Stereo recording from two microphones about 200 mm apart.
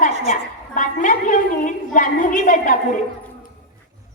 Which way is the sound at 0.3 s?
40° left (ahead or behind).